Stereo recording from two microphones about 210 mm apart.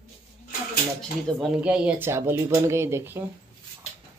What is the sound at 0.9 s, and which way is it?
Speech, centre (ahead or behind).